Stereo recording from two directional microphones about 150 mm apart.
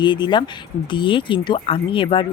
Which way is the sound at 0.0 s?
30° left (ahead or behind).